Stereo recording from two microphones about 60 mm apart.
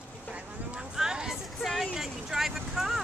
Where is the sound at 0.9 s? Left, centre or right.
Centre.